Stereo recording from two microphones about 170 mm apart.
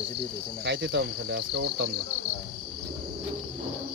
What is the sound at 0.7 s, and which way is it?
Cricket, 65° right (ahead or behind).